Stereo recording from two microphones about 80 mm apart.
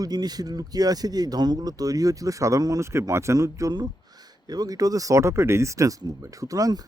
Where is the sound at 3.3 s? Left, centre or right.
Right.